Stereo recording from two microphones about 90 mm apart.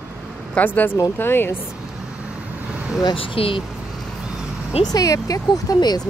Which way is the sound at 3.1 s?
90° left.